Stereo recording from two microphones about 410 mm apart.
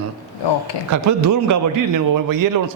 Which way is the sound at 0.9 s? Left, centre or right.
Right.